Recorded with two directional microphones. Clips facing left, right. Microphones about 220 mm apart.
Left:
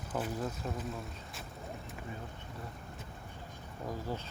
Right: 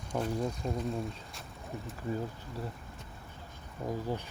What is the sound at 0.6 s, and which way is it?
Speech, 30° right (ahead or behind).